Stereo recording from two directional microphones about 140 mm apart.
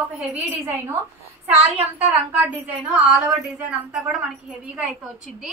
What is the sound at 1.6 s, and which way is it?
A woman's voice, 10° right (ahead or behind).